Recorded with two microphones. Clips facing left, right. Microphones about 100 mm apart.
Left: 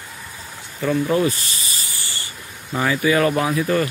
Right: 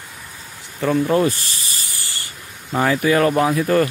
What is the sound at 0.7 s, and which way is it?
Speech, 40° right (ahead or behind).